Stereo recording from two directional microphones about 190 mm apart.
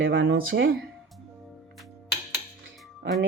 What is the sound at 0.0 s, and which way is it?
Speech, 65° right (ahead or behind).